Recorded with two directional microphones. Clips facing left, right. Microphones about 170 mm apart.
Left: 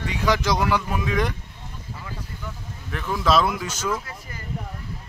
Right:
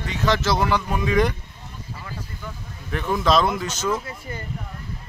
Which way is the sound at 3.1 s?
5° left (ahead or behind).